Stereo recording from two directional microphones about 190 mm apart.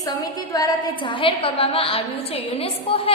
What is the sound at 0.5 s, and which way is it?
A woman's voice, 20° left (ahead or behind).